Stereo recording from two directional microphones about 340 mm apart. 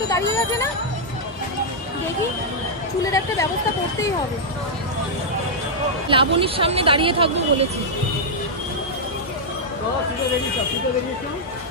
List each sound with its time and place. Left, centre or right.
0.1 s speech: centre
3.0 s speech: centre
6.0 s speech: centre